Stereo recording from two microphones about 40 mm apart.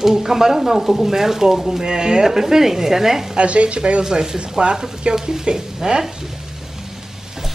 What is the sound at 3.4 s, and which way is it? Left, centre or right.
Speech, right.